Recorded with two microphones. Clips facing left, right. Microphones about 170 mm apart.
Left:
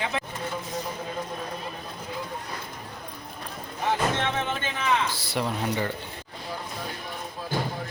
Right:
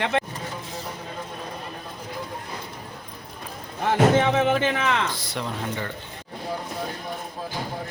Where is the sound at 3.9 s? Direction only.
70° right (ahead or behind).